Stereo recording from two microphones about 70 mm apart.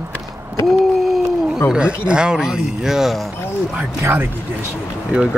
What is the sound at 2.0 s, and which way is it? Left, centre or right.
Speech, centre.